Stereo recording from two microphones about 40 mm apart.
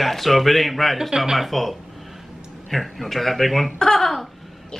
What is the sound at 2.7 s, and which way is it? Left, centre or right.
Speech, centre.